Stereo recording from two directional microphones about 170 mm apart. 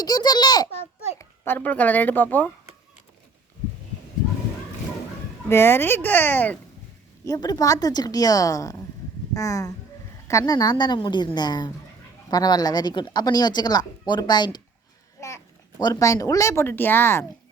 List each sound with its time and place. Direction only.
0.0 s a sound: 25° left (ahead or behind)
1.2 s speech: 10° left (ahead or behind)
5.5 s speech: 15° left (ahead or behind)
7.3 s a woman's voice: 20° left (ahead or behind)
15.8 s speech: 20° left (ahead or behind)